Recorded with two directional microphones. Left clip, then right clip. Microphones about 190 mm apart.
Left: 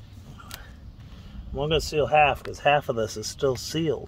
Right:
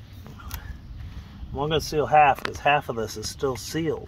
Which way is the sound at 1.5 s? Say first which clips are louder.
Even; 35° left (ahead or behind).